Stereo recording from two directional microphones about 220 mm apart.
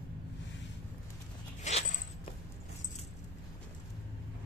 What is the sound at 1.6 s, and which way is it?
Zipper, 30° left (ahead or behind).